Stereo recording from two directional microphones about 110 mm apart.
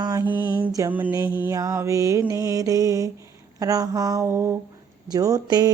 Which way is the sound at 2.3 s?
30° right (ahead or behind).